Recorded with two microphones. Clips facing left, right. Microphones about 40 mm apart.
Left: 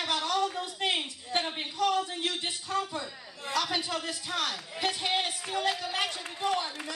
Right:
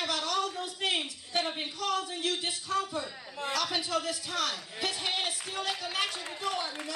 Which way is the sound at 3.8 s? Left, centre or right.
Left.